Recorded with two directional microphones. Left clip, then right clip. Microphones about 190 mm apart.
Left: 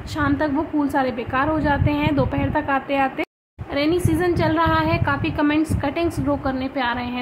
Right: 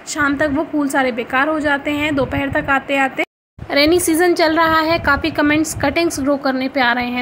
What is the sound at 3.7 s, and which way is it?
A woman's voice, 30° right (ahead or behind).